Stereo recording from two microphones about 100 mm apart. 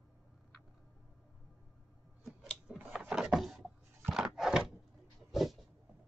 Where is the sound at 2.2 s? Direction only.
Centre (ahead or behind).